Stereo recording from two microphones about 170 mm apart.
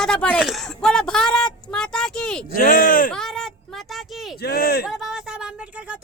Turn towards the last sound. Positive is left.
turn(degrees=-5)  # may be behind; listen again after turning